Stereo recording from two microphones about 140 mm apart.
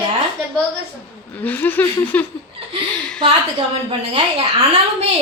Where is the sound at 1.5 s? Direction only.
15° left (ahead or behind).